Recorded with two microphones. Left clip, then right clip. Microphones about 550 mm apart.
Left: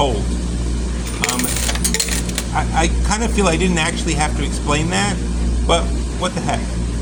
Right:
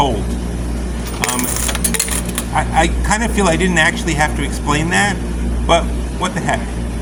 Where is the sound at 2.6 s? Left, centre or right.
Right.